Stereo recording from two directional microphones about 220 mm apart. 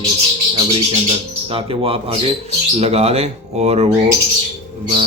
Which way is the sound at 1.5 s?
25° right (ahead or behind).